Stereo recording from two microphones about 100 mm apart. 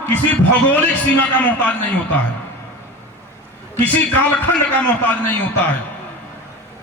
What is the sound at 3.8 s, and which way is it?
A man's voice, 15° left (ahead or behind).